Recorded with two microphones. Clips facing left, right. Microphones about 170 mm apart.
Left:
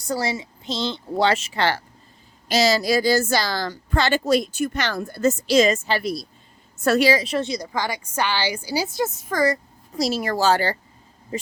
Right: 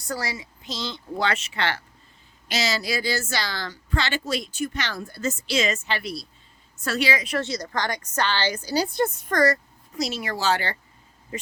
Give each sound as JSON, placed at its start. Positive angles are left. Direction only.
{"t": 0.1, "sound": "a woman's voice", "side_deg": 25}
{"t": 7.1, "sound": "a woman's voice", "side_deg": 30}
{"t": 7.4, "sound": "a woman's voice", "side_deg": 10}
{"t": 9.9, "sound": "speech", "side_deg": 35}